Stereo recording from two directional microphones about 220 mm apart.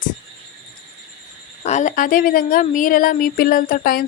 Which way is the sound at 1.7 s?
35° left (ahead or behind).